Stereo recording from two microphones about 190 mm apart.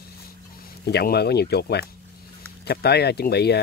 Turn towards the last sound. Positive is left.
turn(degrees=60)  # may be behind; listen again after turning